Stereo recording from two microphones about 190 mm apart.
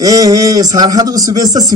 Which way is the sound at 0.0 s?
20° right (ahead or behind).